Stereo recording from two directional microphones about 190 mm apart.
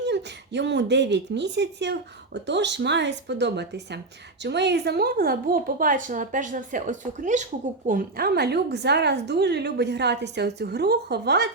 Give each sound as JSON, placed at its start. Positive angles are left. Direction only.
{"t": 0.0, "sound": "a woman's voice", "side_deg": -65}